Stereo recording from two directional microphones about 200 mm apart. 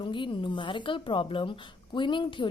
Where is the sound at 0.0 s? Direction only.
25° left (ahead or behind).